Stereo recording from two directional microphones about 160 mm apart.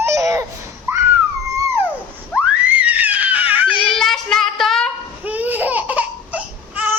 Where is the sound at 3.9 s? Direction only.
Centre (ahead or behind).